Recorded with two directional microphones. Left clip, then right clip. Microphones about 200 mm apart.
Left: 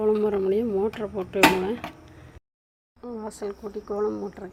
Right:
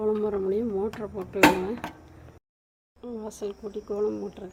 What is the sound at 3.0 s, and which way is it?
Speech, 5° left (ahead or behind).